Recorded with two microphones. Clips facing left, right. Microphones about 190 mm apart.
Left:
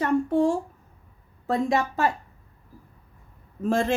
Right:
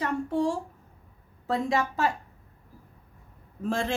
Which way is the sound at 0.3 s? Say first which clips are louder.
Left 3 dB; 50° left (ahead or behind).